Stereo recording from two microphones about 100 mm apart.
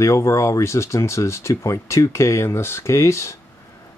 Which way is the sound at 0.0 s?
30° left (ahead or behind).